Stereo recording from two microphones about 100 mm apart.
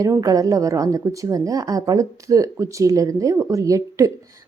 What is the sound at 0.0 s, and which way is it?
A woman's voice, 35° right (ahead or behind).